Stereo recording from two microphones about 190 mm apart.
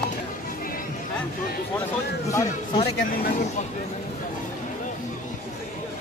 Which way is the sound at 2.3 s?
15° left (ahead or behind).